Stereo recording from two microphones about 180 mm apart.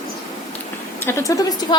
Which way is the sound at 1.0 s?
20° left (ahead or behind).